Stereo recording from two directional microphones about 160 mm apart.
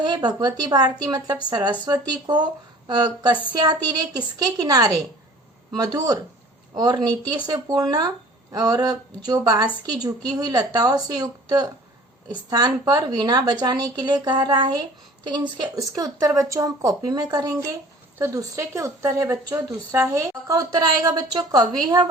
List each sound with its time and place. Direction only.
0.0 s speech: 25° right (ahead or behind)